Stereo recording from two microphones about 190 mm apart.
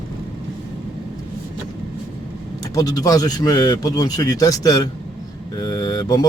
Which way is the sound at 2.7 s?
20° left (ahead or behind).